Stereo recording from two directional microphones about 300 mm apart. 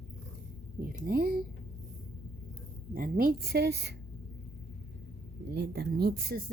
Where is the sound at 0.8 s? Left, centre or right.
Right.